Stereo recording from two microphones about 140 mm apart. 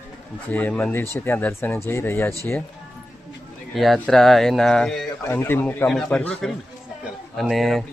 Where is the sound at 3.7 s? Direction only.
Centre (ahead or behind).